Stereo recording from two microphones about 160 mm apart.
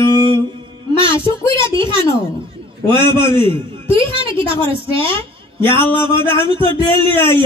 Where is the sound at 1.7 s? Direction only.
30° right (ahead or behind).